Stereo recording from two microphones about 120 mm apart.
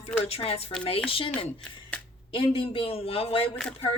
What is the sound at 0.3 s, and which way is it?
Speech, 55° left (ahead or behind).